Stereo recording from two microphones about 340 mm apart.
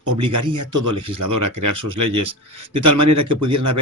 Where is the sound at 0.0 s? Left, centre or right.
Right.